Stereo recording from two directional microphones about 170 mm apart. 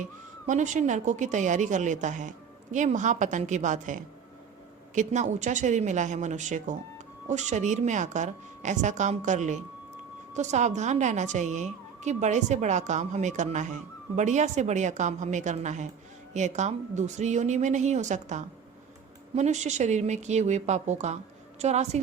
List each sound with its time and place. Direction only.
0.0 s a woman's voice: 45° right (ahead or behind)